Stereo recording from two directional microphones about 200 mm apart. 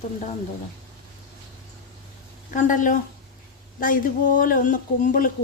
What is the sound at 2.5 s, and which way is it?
Speech, 40° left (ahead or behind).